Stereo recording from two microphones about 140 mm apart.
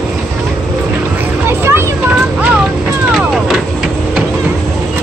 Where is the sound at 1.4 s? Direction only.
15° right (ahead or behind).